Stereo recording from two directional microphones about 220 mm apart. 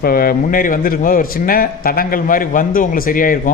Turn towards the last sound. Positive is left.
turn(degrees=40)  # may be behind; listen again after turning